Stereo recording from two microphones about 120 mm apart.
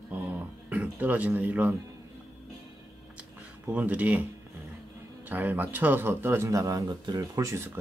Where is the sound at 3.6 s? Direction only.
15° right (ahead or behind).